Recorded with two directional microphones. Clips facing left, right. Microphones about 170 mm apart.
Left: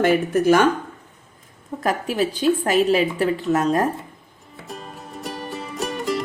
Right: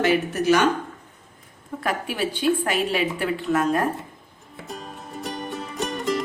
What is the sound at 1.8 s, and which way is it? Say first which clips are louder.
A woman's voice: left 4 dB; 40° left (ahead or behind).